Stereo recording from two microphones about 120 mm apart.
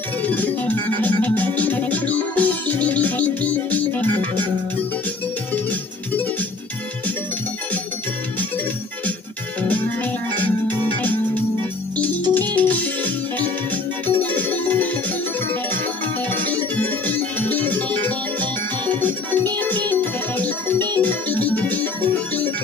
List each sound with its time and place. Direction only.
0.2 s music: 15° left (ahead or behind)
12.0 s music: 15° left (ahead or behind)
16.3 s music: 15° left (ahead or behind)